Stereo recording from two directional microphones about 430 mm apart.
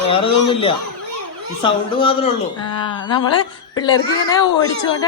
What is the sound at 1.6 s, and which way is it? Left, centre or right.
A woman's voice, centre.